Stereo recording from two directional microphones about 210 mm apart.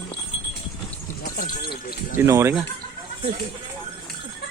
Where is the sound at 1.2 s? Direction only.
50° left (ahead or behind).